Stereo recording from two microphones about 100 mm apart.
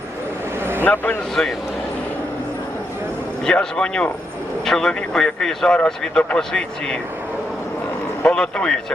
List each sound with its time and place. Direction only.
0.6 s vehicle: 20° right (ahead or behind)
0.9 s speech: 20° left (ahead or behind)
3.4 s speech: 10° left (ahead or behind)
8.2 s speech: 10° left (ahead or behind)